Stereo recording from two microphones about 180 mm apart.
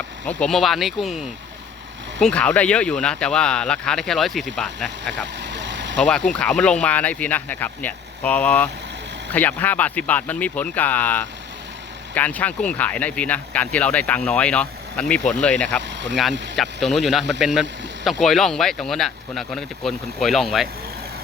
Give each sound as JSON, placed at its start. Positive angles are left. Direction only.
{"t": 0.3, "sound": "speech", "side_deg": 5}
{"t": 5.1, "sound": "vehicle", "side_deg": -80}
{"t": 6.0, "sound": "speech", "side_deg": 5}